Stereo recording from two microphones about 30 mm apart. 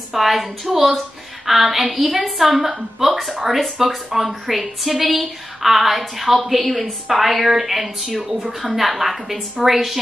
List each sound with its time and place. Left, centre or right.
0.1 s a woman's voice: centre